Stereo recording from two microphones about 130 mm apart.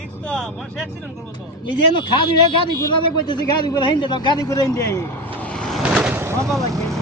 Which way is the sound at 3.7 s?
35° left (ahead or behind).